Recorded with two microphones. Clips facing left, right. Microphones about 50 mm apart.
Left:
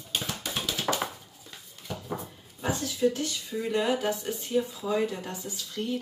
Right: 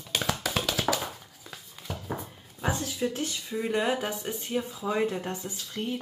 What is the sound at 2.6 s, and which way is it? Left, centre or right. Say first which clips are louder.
Speech: left 3 dB; right.